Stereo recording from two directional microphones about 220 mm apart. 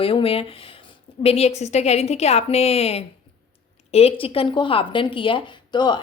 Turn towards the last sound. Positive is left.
turn(degrees=20)  # may be behind; listen again after turning